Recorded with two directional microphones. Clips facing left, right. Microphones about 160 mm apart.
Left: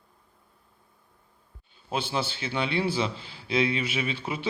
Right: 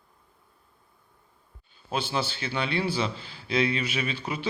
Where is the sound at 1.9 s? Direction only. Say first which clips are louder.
Even; 25° left (ahead or behind).